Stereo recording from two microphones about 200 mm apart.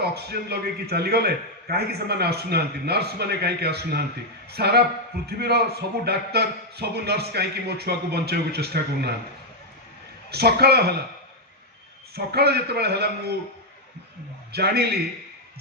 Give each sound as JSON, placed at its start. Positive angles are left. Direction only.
{"t": 0.0, "sound": "a man's voice", "side_deg": -55}
{"t": 10.3, "sound": "a man's voice", "side_deg": -55}
{"t": 12.1, "sound": "a man's voice", "side_deg": -50}
{"t": 14.5, "sound": "a man's voice", "side_deg": -55}